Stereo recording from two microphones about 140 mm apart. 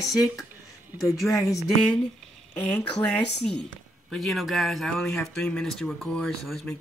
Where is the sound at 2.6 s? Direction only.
5° left (ahead or behind).